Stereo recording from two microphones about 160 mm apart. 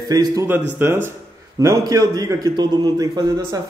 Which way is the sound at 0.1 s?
25° right (ahead or behind).